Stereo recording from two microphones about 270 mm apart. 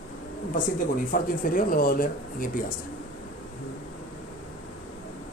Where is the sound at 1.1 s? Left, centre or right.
Left.